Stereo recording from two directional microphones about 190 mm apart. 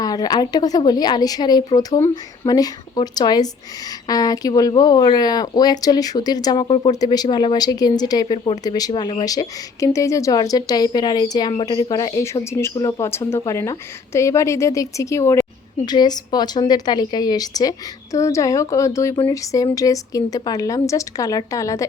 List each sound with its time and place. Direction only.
0.0 s a woman's voice: 20° left (ahead or behind)